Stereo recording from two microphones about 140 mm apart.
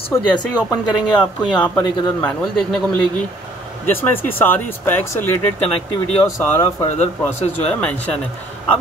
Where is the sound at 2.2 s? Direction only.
5° left (ahead or behind).